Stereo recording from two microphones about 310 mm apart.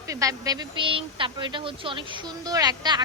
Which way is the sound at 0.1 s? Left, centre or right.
Centre.